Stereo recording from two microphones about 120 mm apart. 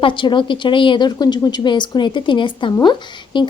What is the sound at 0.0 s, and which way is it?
Speech, 45° left (ahead or behind).